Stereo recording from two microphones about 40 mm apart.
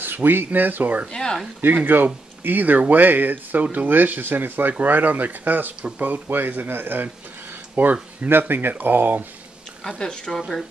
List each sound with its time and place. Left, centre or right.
0.0 s speech: right
6.2 s speech: right
7.7 s speech: right
8.3 s speech: right
9.9 s speech: centre